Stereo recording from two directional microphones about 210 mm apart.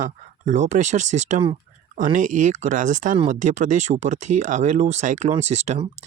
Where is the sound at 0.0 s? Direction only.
35° right (ahead or behind).